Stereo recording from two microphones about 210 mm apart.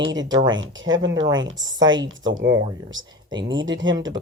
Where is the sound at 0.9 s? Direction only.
60° right (ahead or behind).